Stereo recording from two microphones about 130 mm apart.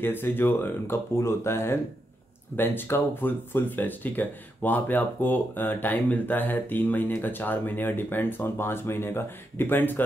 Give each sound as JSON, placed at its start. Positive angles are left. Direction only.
{"t": 0.0, "sound": "speech", "side_deg": 15}